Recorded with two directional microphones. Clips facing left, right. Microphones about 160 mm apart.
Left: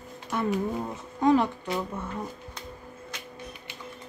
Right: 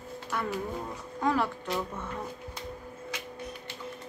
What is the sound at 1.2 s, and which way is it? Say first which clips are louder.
Speech: left 6 dB; 20° left (ahead or behind).